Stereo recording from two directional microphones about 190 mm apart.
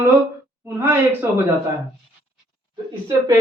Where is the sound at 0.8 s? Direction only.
10° right (ahead or behind).